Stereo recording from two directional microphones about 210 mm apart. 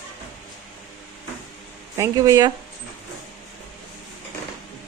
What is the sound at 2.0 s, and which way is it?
Speech, 15° right (ahead or behind).